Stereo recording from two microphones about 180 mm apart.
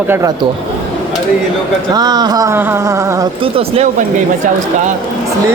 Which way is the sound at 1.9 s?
20° right (ahead or behind).